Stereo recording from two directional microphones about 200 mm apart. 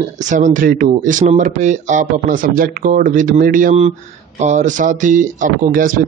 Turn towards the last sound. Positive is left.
turn(degrees=-45)  # may be behind; listen again after turning